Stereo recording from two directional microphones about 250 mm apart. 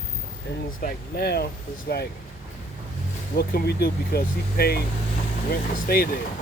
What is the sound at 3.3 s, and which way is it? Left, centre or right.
Speech, left.